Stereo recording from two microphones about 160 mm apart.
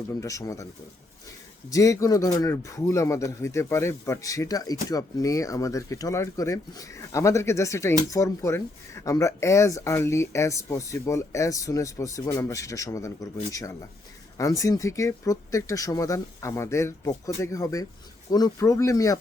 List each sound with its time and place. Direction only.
0.2 s speech: 20° left (ahead or behind)
1.7 s speech: 20° left (ahead or behind)